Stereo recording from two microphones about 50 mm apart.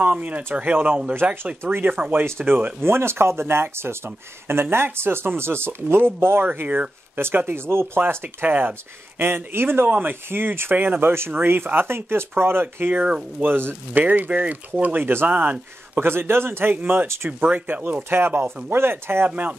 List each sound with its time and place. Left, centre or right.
0.0 s speech: right
1.6 s speech: right
2.8 s speech: right
8.5 s speech: right
9.2 s speech: right
9.8 s speech: right
12.9 s speech: right
13.4 s speech: right
16.0 s speech: right
16.7 s speech: right
18.1 s speech: right